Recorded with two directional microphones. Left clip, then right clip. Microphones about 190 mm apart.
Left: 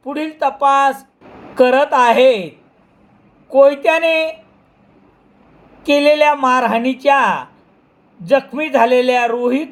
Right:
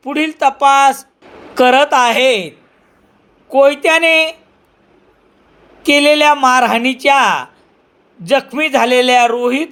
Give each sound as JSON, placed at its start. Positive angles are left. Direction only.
{"t": 0.0, "sound": "speech", "side_deg": -25}
{"t": 3.5, "sound": "speech", "side_deg": -25}
{"t": 5.8, "sound": "speech", "side_deg": -25}